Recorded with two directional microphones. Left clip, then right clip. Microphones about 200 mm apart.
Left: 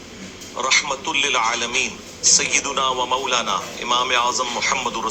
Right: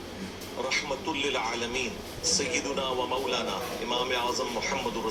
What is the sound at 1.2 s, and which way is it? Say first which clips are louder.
A man's voice: left 11 dB; 45° left (ahead or behind).